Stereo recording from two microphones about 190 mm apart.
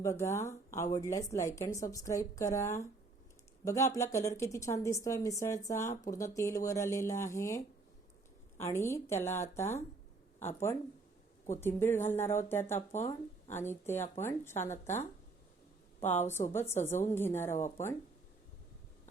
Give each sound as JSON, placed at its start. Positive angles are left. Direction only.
{"t": 0.0, "sound": "speech", "side_deg": 15}
{"t": 12.9, "sound": "speech", "side_deg": 40}
{"t": 13.5, "sound": "speech", "side_deg": 10}
{"t": 16.0, "sound": "speech", "side_deg": 10}